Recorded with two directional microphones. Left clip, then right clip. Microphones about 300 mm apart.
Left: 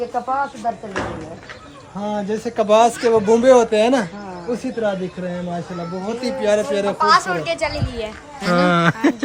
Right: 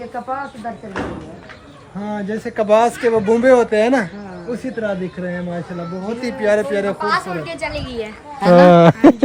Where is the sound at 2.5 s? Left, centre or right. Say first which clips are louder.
Even; centre.